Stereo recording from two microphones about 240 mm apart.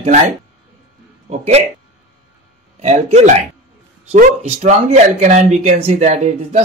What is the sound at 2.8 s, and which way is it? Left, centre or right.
Speech, right.